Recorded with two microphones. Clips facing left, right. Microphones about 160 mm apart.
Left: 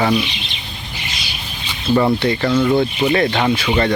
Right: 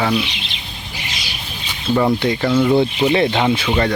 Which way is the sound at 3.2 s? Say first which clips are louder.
Even; 5° right (ahead or behind).